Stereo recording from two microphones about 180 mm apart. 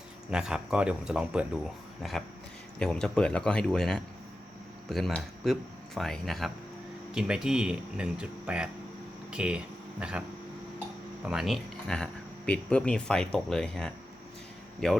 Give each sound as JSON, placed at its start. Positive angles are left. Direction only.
{"t": 0.3, "sound": "speech", "side_deg": -5}
{"t": 11.3, "sound": "speech", "side_deg": 0}